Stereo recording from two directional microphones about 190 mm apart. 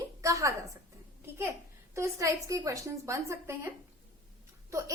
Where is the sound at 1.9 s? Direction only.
15° right (ahead or behind).